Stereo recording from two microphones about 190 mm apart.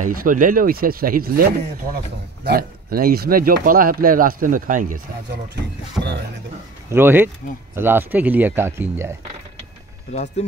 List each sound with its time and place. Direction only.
0.0 s speech: 45° right (ahead or behind)
6.9 s speech: 10° right (ahead or behind)
10.1 s speech: 35° left (ahead or behind)